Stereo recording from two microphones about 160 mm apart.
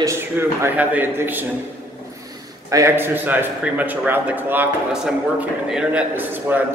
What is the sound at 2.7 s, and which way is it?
A man's voice, 15° right (ahead or behind).